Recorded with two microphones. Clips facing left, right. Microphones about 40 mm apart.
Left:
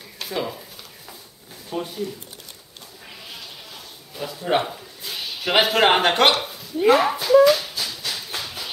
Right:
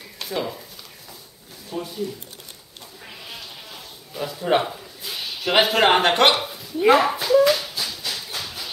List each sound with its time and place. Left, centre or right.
0.2 s speech: centre
1.7 s speech: left
4.1 s a man's voice: centre
6.4 s a sound: centre
7.0 s speech: centre
7.4 s a sound: centre
8.4 s tap: centre